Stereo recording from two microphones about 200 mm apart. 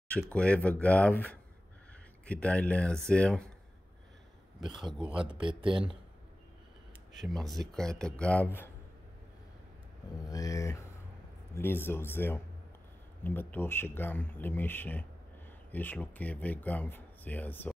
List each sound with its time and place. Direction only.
0.1 s a man's voice: 5° left (ahead or behind)
5.4 s speech: 25° right (ahead or behind)
7.2 s a man's voice: centre (ahead or behind)
10.2 s speech: 15° left (ahead or behind)